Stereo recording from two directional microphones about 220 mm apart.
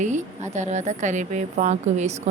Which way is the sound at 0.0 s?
30° right (ahead or behind).